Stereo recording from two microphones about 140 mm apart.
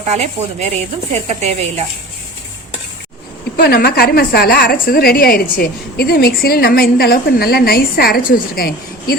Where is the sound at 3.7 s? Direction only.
90° left.